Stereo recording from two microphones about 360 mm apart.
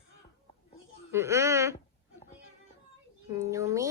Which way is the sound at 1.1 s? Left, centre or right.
Centre.